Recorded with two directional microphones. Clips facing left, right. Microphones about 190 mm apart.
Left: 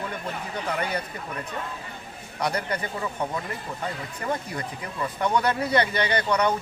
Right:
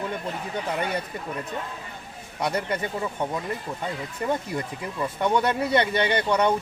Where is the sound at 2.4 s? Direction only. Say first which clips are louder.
Right 1 dB; 25° right (ahead or behind).